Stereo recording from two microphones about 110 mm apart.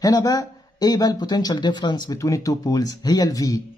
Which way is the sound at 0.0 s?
35° left (ahead or behind).